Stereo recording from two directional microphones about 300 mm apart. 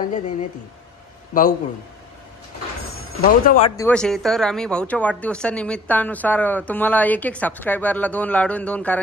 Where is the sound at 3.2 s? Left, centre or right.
Left.